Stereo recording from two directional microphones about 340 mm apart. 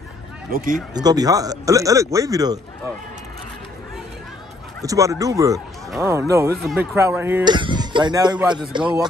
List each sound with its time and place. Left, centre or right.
0.5 s speech: right
0.9 s speech: centre
4.8 s speech: centre